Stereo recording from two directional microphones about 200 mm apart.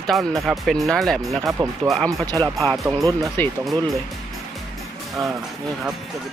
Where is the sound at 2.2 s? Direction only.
20° right (ahead or behind).